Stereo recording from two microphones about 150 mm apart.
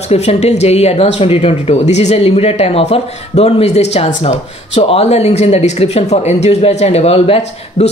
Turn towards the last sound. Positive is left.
turn(degrees=40)  # may be behind; listen again after turning